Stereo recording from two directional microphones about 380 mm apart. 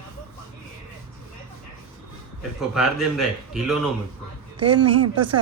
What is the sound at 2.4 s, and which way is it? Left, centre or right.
A man's voice, centre.